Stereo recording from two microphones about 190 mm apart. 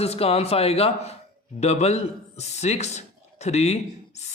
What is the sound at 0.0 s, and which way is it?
Speech, 30° left (ahead or behind).